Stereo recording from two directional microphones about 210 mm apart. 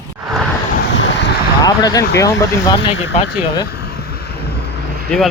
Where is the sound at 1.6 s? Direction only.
15° left (ahead or behind).